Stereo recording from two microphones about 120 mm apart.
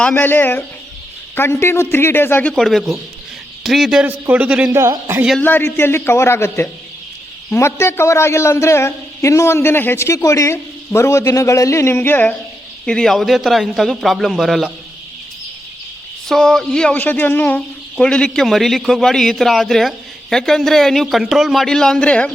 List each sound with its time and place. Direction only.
0.0 s a man's voice: 15° left (ahead or behind)
2.5 s a man's voice: centre (ahead or behind)
4.0 s a man's voice: 15° right (ahead or behind)
4.7 s a man's voice: 25° right (ahead or behind)
5.4 s a man's voice: 15° left (ahead or behind)
16.3 s a man's voice: 5° left (ahead or behind)